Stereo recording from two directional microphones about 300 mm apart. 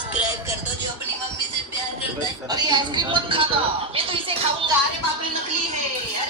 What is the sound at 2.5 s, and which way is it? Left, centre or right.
A woman's voice, centre.